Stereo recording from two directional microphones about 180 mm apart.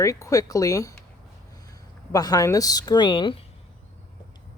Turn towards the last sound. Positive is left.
turn(degrees=25)  # may be behind; listen again after turning